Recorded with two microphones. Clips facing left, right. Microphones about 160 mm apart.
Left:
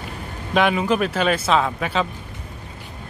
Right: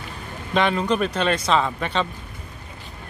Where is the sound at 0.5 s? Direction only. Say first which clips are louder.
Left 2 dB; 5° left (ahead or behind).